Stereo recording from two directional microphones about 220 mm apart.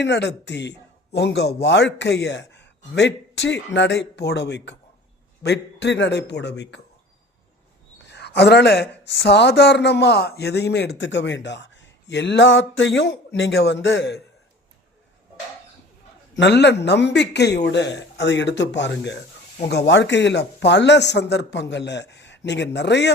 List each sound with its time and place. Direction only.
0.0 s speech: 50° left (ahead or behind)
7.9 s speech: 50° left (ahead or behind)
16.3 s speech: 50° left (ahead or behind)